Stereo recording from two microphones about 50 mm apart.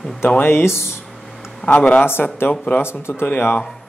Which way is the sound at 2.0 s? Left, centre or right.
Left.